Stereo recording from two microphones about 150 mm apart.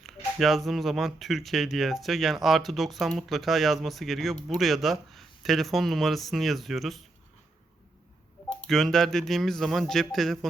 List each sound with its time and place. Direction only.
0.0 s speech: centre (ahead or behind)
8.6 s speech: centre (ahead or behind)